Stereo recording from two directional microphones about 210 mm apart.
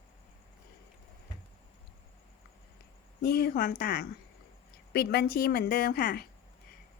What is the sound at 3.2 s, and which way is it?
A woman's voice, 45° left (ahead or behind).